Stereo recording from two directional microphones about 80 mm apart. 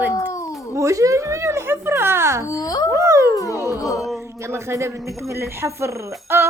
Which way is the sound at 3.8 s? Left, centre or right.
Left.